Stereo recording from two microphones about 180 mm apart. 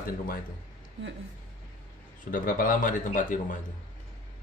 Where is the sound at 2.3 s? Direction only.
50° left (ahead or behind).